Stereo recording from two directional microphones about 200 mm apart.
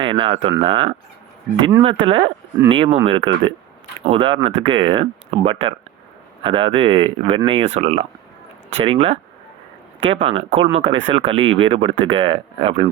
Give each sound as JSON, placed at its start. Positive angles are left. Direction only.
{"t": 0.0, "sound": "speech", "side_deg": -25}
{"t": 10.8, "sound": "speech", "side_deg": -65}
{"t": 11.1, "sound": "speech", "side_deg": -30}